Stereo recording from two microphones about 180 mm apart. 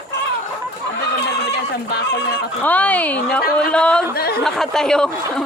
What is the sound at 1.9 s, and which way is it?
Fowl, 65° left (ahead or behind).